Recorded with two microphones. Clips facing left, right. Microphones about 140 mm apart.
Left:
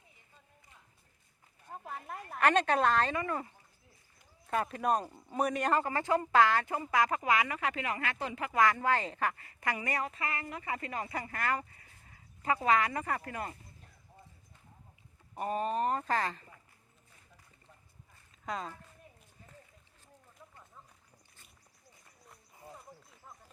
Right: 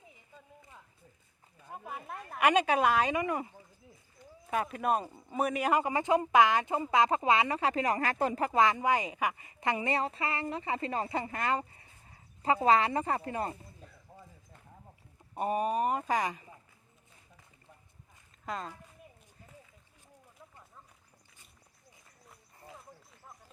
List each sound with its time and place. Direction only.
2.0 s speech: centre (ahead or behind)
2.4 s speech: 10° right (ahead or behind)
4.4 s speech: 5° right (ahead or behind); by 8.5 s 40° right (ahead or behind)
8.5 s a woman's voice: 20° right (ahead or behind)
15.4 s speech: 15° right (ahead or behind)
18.4 s speech: centre (ahead or behind)
22.7 s a sound: centre (ahead or behind)